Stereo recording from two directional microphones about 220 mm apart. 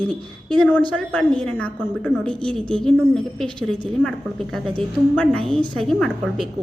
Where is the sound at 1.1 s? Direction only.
5° left (ahead or behind).